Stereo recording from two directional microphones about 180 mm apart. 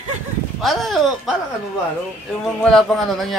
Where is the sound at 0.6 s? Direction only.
Centre (ahead or behind).